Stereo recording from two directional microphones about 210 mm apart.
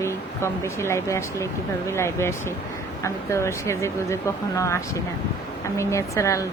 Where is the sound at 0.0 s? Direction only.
15° left (ahead or behind).